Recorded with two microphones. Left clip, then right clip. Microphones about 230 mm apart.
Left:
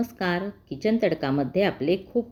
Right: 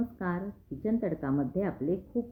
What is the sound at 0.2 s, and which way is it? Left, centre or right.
Speech, left.